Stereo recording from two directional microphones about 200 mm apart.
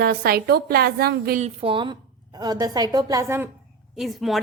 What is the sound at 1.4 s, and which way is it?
A woman's voice, 25° right (ahead or behind).